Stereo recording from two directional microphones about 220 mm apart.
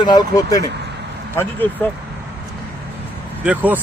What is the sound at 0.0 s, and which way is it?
Speech, 20° left (ahead or behind).